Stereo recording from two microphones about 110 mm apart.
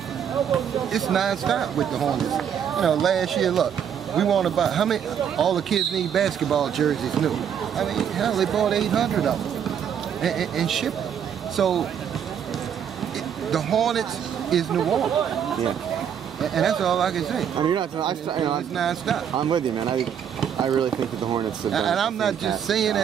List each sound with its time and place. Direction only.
0.9 s speech: centre (ahead or behind)
13.5 s speech: centre (ahead or behind)
16.3 s speech: centre (ahead or behind)
17.6 s speech: 45° right (ahead or behind)
18.8 s speech: centre (ahead or behind)
19.3 s speech: 40° right (ahead or behind)
21.6 s speech: centre (ahead or behind)